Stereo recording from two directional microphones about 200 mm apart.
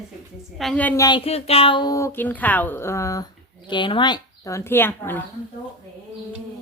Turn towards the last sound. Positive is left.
turn(degrees=10)  # may be behind; listen again after turning